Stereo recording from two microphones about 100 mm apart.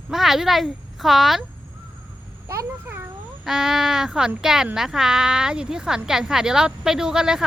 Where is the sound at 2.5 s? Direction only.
25° right (ahead or behind).